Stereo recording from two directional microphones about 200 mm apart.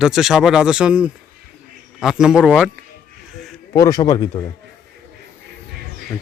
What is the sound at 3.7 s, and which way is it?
Speech, 15° left (ahead or behind).